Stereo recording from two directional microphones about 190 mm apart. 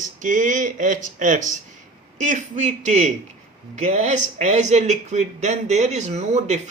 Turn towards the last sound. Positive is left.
turn(degrees=-35)  # may be behind; listen again after turning